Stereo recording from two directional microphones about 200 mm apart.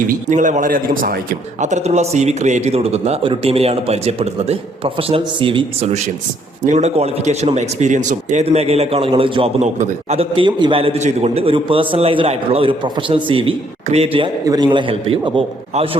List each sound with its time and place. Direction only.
0.1 s a man's voice: 40° right (ahead or behind)